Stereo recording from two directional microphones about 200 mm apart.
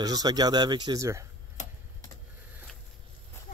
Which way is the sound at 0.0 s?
20° right (ahead or behind).